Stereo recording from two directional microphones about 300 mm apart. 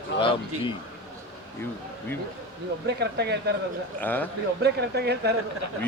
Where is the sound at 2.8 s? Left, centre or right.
Right.